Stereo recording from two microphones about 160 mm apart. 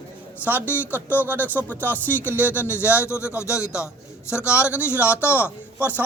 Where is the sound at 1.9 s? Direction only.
10° left (ahead or behind).